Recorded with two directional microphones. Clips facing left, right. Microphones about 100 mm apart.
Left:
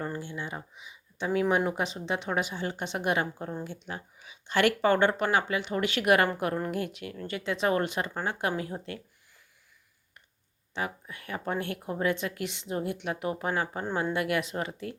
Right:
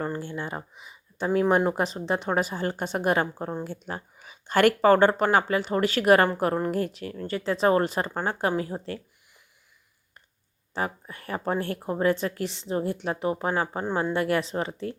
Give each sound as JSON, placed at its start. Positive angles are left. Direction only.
{"t": 0.0, "sound": "speech", "side_deg": -45}
{"t": 10.8, "sound": "speech", "side_deg": -40}